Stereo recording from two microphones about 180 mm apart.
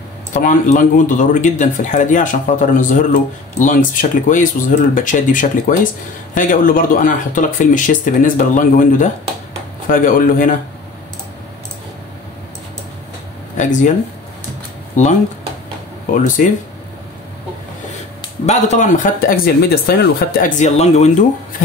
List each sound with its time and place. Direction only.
0.3 s speech: 45° left (ahead or behind)
13.6 s speech: 45° left (ahead or behind)
15.0 s speech: 40° left (ahead or behind)
16.2 s speech: 45° left (ahead or behind)
18.4 s speech: 40° left (ahead or behind)